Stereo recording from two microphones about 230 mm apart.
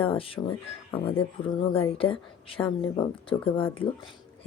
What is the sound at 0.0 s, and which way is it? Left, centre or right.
Speech, left.